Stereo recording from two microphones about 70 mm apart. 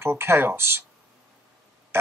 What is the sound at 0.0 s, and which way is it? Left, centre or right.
Speech, right.